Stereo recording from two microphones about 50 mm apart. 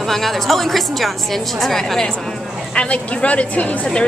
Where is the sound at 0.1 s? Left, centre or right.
Centre.